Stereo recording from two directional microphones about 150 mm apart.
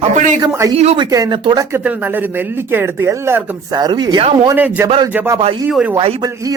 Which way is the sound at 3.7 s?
30° right (ahead or behind).